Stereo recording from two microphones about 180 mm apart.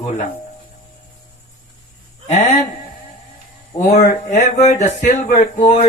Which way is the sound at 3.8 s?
40° left (ahead or behind).